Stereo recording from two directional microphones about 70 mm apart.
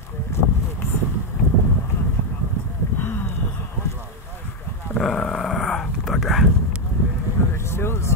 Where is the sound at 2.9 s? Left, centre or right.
Left.